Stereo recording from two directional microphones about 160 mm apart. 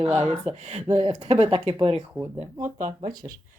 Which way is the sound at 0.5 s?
40° right (ahead or behind).